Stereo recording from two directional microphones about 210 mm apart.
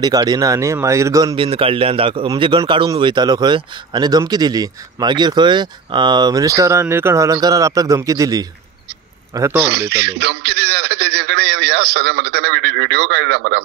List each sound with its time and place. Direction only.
0.0 s a man's voice: 20° right (ahead or behind)
9.7 s a man's voice: 50° right (ahead or behind)